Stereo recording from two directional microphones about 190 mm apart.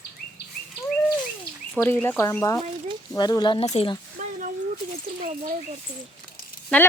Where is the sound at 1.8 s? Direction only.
10° left (ahead or behind); by 3.9 s 30° left (ahead or behind).